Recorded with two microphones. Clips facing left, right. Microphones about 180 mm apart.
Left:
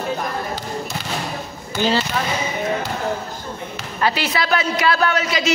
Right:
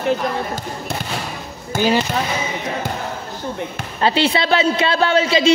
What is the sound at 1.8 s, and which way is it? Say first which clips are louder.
Speech: right 2 dB; 15° right (ahead or behind).